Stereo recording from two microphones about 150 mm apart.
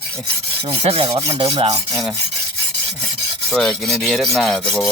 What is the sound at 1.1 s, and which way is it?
Rub, 20° right (ahead or behind).